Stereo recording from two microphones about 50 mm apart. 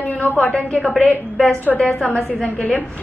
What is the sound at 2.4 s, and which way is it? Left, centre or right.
Speech, left.